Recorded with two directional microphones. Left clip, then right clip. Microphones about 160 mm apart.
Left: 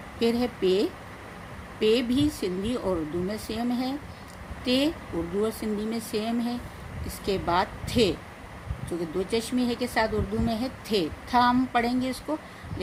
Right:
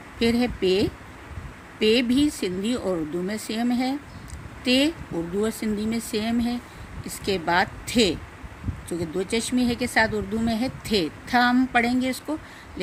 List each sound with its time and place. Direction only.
0.2 s speech: 40° right (ahead or behind)